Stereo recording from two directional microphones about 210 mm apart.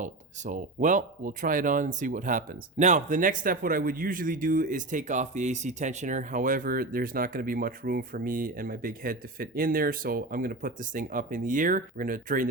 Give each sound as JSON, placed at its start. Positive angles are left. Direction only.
{"t": 0.0, "sound": "speech", "side_deg": -35}